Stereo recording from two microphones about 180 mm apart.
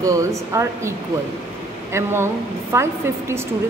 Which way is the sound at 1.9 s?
15° right (ahead or behind).